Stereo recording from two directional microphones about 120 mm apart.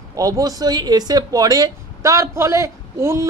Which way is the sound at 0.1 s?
30° right (ahead or behind).